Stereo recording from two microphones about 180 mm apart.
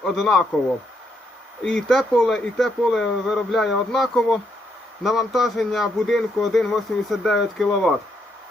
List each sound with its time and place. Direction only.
0.0 s a man's voice: centre (ahead or behind)
1.6 s a man's voice: 5° left (ahead or behind)